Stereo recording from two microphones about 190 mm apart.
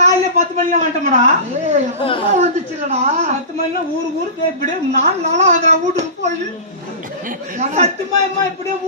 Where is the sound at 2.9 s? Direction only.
35° right (ahead or behind).